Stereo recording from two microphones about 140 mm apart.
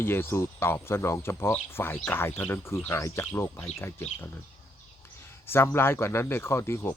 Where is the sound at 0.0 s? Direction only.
15° left (ahead or behind).